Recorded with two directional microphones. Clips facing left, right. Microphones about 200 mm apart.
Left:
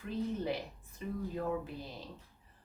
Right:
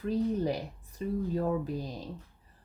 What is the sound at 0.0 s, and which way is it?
Speech, 40° right (ahead or behind).